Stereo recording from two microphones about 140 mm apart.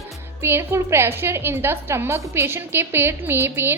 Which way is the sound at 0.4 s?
20° right (ahead or behind).